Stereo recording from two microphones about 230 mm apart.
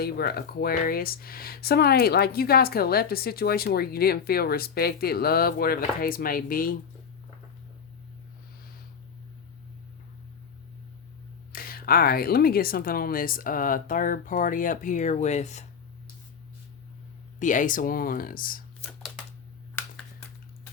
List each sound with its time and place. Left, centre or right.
0.0 s speech: left
11.5 s speech: left
17.4 s speech: left